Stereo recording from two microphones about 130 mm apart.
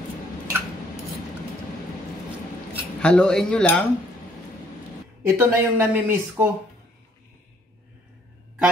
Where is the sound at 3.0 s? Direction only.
5° left (ahead or behind).